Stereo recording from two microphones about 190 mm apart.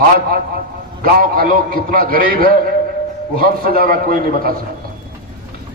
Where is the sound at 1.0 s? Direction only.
50° right (ahead or behind).